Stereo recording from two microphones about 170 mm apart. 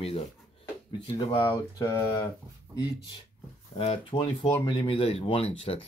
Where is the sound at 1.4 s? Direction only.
20° left (ahead or behind).